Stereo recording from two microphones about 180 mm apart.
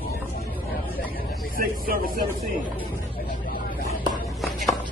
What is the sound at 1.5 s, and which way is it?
Speech, 55° right (ahead or behind).